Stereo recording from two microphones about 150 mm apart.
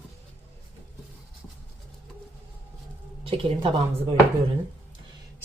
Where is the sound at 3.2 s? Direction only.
35° right (ahead or behind).